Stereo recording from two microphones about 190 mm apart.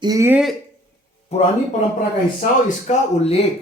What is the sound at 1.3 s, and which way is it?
Speech, 35° left (ahead or behind).